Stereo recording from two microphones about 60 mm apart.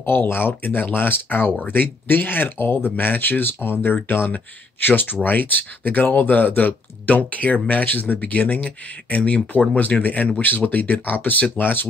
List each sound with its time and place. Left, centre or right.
0.0 s speech: left